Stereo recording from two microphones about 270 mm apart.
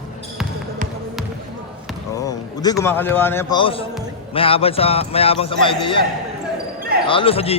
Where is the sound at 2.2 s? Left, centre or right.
Centre.